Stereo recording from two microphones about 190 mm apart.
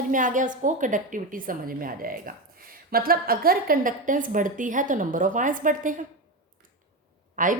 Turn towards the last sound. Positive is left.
turn(degrees=-45)  # may be behind; listen again after turning